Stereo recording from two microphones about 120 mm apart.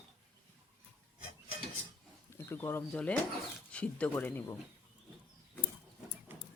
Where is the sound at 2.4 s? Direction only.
20° left (ahead or behind).